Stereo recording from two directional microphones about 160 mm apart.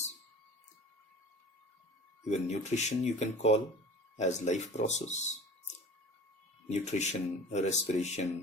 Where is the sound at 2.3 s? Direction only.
45° left (ahead or behind).